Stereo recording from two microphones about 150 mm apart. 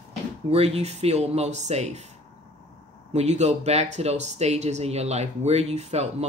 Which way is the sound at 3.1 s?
50° right (ahead or behind).